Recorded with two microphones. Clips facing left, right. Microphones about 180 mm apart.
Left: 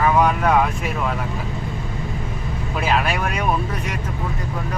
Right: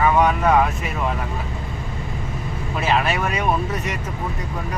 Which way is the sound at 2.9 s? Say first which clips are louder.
Right 1 dB; centre (ahead or behind).